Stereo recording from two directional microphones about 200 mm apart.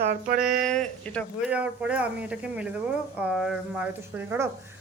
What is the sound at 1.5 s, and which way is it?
Speech, 5° right (ahead or behind).